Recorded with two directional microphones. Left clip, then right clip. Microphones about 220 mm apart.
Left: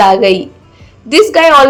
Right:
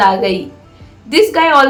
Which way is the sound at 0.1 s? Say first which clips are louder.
Left 6 dB; 30° left (ahead or behind).